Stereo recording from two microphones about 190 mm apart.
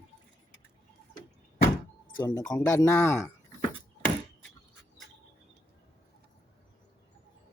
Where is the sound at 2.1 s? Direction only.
20° left (ahead or behind).